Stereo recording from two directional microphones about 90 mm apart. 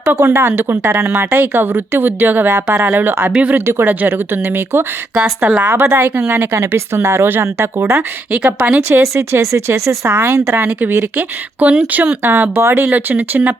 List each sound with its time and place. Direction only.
0.1 s speech: 30° right (ahead or behind)
5.1 s speech: 10° right (ahead or behind)
5.7 s speech: 25° right (ahead or behind)
8.3 s speech: 15° right (ahead or behind)
8.9 s speech: 30° right (ahead or behind)
10.1 s speech: 25° right (ahead or behind)